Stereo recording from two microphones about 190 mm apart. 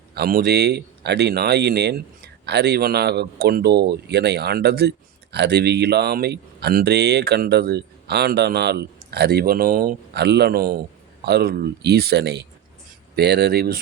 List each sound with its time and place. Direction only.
0.1 s speech: 55° right (ahead or behind)